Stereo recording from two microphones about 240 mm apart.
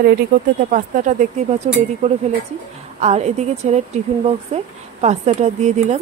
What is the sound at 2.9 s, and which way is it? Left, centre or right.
A woman's voice, right.